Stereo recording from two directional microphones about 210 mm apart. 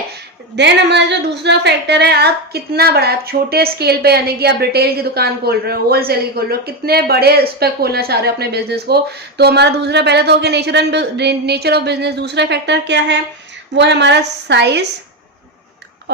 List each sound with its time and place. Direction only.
0.1 s a woman's voice: 55° right (ahead or behind)
16.1 s owl: 55° right (ahead or behind)